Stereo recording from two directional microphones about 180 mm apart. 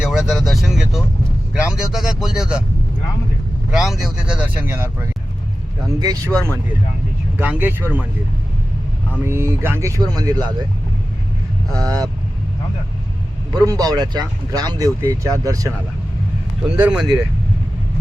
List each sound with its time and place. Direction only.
0.0 s speech: 5° right (ahead or behind)
3.7 s speech: centre (ahead or behind); by 6.3 s 20° right (ahead or behind)
7.3 s speech: 10° right (ahead or behind)
9.2 s speech: 15° right (ahead or behind)
11.7 s speech: 20° right (ahead or behind)
13.5 s speech: 20° right (ahead or behind)
16.6 s speech: 5° right (ahead or behind)